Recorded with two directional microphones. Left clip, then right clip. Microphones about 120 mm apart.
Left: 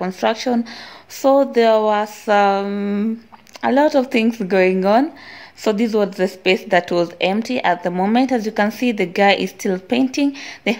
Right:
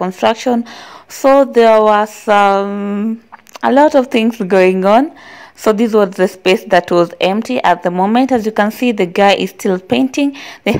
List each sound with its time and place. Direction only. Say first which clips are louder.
0.0 s a woman's voice: right 6 dB; 45° right (ahead or behind)
2.7 s speech: right 3 dB; 25° right (ahead or behind)
3.6 s a woman's voice: right 6 dB; 45° right (ahead or behind)